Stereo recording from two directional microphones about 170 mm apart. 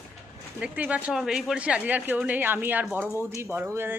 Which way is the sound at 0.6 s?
10° right (ahead or behind).